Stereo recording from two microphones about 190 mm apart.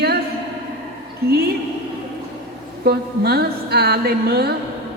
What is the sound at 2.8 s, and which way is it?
A man's voice, 60° right (ahead or behind).